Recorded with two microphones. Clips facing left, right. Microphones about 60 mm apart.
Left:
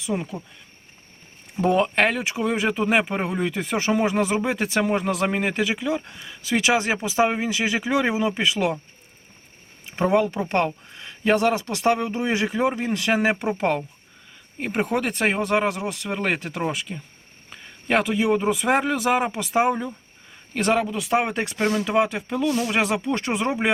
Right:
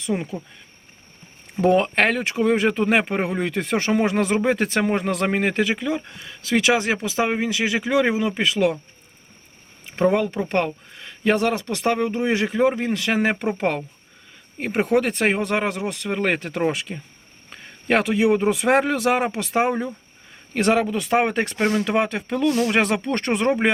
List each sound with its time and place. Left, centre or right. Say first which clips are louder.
0.1 s speech: right 1 dB; right
1.6 s a man's voice: right 2 dB; centre
9.9 s a man's voice: right 1 dB; centre
19.6 s speech: even; centre